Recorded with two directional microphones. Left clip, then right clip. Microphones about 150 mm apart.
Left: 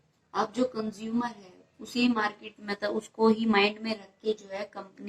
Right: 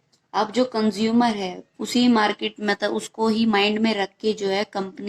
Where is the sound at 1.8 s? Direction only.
55° right (ahead or behind).